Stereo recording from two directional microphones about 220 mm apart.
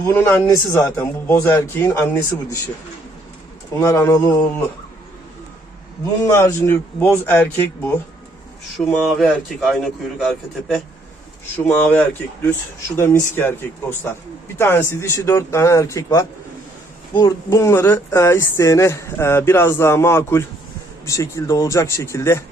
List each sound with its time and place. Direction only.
0.0 s speech: 10° left (ahead or behind)
3.8 s speech: 10° left (ahead or behind)
6.3 s speech: 10° left (ahead or behind)
9.0 s a man's voice: centre (ahead or behind)
14.6 s speech: 10° left (ahead or behind)